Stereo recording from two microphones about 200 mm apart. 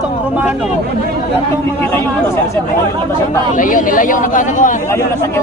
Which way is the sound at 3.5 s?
40° left (ahead or behind).